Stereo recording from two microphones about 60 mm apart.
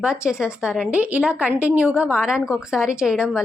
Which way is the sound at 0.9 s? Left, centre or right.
Right.